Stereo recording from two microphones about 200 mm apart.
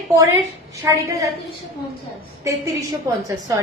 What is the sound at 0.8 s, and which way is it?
Speech, 15° right (ahead or behind).